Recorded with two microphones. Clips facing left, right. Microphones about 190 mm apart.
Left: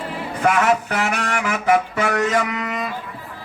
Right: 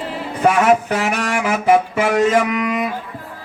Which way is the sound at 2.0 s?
20° right (ahead or behind).